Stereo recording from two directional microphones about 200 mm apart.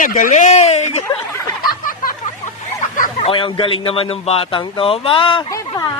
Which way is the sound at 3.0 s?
30° left (ahead or behind).